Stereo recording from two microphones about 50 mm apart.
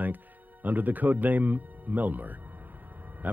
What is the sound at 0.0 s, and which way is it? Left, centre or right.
Speech, right.